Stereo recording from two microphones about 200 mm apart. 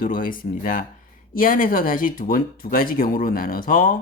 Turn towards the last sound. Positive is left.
turn(degrees=45)  # may be behind; listen again after turning